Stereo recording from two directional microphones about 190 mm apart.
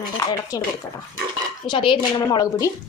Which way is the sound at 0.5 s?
20° left (ahead or behind).